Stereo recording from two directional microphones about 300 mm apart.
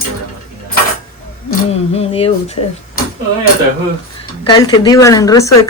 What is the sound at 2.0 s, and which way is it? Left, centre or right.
Speech, centre.